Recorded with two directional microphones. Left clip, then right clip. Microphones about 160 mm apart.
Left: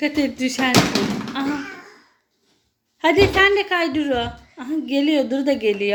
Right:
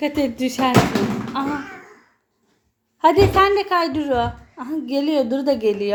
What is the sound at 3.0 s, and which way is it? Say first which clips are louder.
A woman's voice: right 1 dB; 5° right (ahead or behind).